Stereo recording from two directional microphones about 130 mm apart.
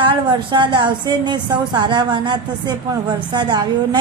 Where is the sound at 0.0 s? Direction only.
35° right (ahead or behind).